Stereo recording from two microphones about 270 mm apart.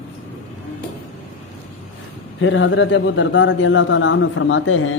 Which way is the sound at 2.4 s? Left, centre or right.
Left.